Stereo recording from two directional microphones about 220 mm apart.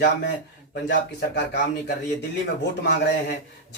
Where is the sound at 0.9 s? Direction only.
50° left (ahead or behind).